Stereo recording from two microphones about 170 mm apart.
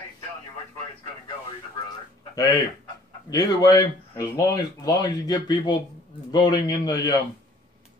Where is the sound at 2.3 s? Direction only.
20° left (ahead or behind).